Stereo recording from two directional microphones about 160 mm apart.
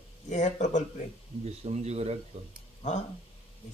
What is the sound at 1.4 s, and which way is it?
Speech, 40° right (ahead or behind).